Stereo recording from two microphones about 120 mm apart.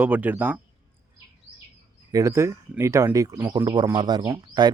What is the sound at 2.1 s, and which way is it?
Speech, 25° right (ahead or behind).